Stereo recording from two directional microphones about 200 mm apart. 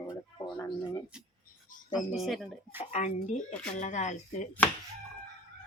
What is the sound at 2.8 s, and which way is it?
Speech, 35° left (ahead or behind).